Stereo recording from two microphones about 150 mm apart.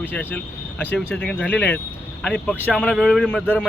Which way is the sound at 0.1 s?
10° left (ahead or behind).